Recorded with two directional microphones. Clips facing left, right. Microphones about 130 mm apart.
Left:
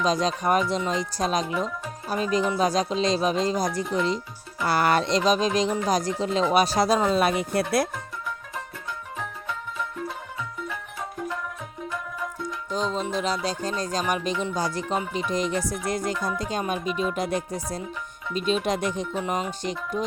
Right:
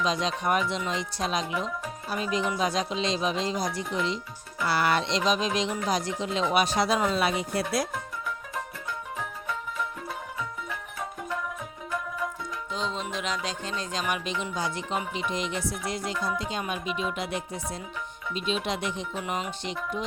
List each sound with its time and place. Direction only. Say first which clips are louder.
0.0 s speech: left 4 dB; 40° left (ahead or behind); by 7.9 s 60° left (ahead or behind)
12.7 s speech: left 6 dB; 40° left (ahead or behind)